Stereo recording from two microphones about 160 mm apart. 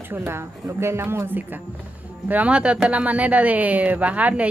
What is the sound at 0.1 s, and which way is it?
Speech, 15° right (ahead or behind).